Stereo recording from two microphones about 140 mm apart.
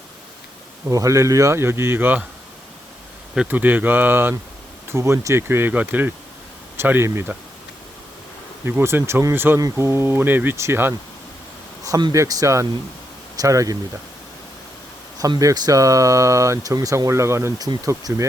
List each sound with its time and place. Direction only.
0.9 s speech: 25° right (ahead or behind)
3.3 s speech: 10° right (ahead or behind)
8.6 s speech: 15° right (ahead or behind)
11.8 s speech: 30° right (ahead or behind)
15.2 s speech: 25° right (ahead or behind)